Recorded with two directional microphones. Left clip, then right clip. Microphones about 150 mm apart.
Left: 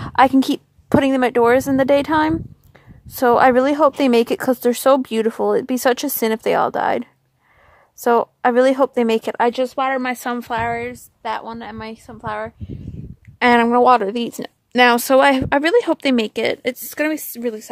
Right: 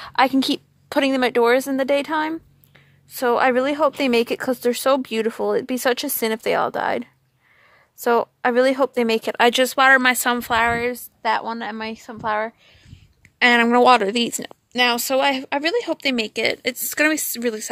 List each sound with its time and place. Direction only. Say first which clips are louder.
0.0 s a woman's voice: left 4 dB; 30° left (ahead or behind)
9.5 s speech: right 5 dB; centre (ahead or behind)
10.7 s a woman's voice: right 2 dB; 30° right (ahead or behind)
13.4 s a woman's voice: left 2 dB; 20° left (ahead or behind)
13.7 s speech: left 1 dB; 5° left (ahead or behind)
14.7 s a woman's voice: left 6 dB; 45° left (ahead or behind); by 17.0 s 20° left (ahead or behind)
17.0 s speech: right 2 dB; 10° left (ahead or behind)